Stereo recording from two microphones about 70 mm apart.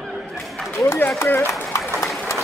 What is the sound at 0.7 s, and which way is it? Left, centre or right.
Speech, left.